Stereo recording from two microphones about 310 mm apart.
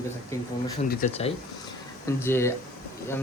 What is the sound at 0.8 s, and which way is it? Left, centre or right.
Speech, left.